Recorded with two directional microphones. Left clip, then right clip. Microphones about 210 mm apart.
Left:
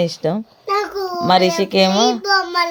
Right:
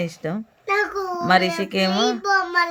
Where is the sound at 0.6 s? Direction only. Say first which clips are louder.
Left 2 dB; centre (ahead or behind).